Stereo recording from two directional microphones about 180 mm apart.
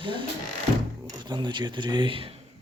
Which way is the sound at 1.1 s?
25° right (ahead or behind).